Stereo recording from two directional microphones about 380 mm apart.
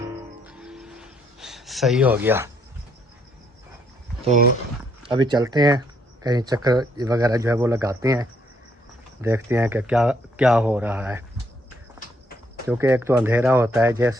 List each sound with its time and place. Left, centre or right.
0.4 s music: centre
4.2 s speech: centre
12.6 s speech: centre